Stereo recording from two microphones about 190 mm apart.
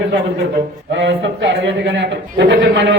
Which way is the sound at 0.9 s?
75° right (ahead or behind).